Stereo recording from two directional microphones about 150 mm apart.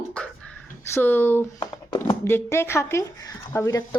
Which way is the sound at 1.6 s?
25° left (ahead or behind).